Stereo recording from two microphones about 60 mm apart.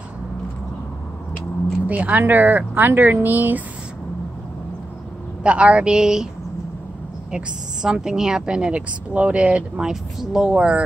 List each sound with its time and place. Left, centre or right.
1.9 s speech: right
5.4 s speech: centre
7.2 s a woman's voice: centre